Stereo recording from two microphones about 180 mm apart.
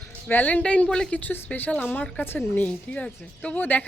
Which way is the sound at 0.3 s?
10° left (ahead or behind).